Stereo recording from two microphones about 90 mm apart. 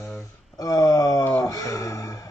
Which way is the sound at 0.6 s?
35° left (ahead or behind).